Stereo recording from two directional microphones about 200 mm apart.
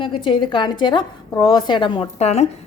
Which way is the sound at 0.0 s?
25° left (ahead or behind).